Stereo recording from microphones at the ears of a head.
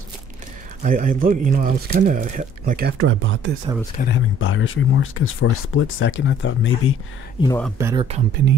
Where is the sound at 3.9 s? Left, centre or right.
Left.